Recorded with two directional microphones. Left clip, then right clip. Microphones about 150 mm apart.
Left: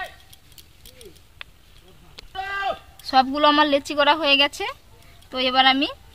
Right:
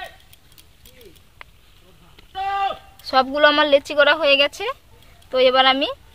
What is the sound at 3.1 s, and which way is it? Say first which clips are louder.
A woman's voice: right 2 dB; 40° right (ahead or behind).